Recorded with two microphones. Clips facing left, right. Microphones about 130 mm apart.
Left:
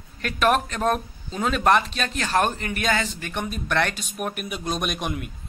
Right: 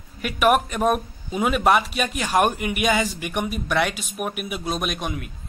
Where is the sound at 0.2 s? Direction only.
10° right (ahead or behind).